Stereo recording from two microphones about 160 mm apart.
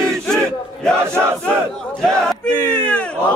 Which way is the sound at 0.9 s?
15° right (ahead or behind).